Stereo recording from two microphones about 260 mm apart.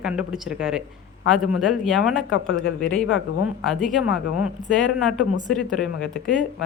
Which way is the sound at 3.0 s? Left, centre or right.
Left.